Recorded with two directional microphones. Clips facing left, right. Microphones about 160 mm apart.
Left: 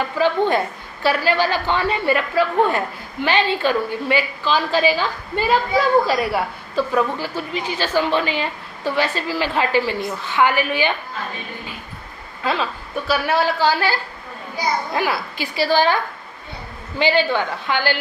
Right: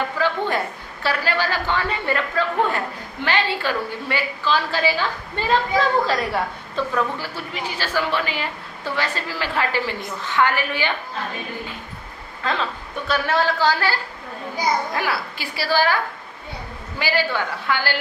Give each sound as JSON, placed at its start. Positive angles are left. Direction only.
{"t": 0.2, "sound": "a sound", "side_deg": 20}
{"t": 1.0, "sound": "a woman's voice", "side_deg": 15}
{"t": 12.4, "sound": "a woman's voice", "side_deg": 10}
{"t": 17.0, "sound": "a man's voice", "side_deg": 20}